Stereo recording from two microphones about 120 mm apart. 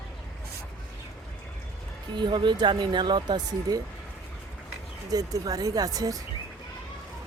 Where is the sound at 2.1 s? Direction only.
40° right (ahead or behind).